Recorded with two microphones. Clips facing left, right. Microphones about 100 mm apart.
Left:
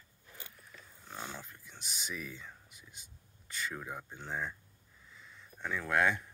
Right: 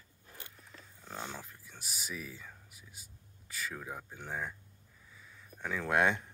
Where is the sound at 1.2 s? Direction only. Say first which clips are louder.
Right 1 dB; 5° right (ahead or behind).